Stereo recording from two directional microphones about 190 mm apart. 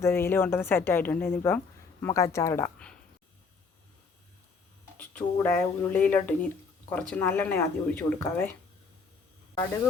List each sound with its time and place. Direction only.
0.0 s a woman's voice: 15° left (ahead or behind)
4.9 s a woman's voice: 10° left (ahead or behind)